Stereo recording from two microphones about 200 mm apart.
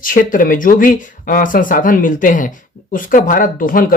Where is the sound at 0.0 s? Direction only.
45° left (ahead or behind).